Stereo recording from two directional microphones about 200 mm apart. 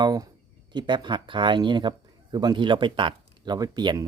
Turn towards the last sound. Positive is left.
turn(degrees=-20)  # may be behind; listen again after turning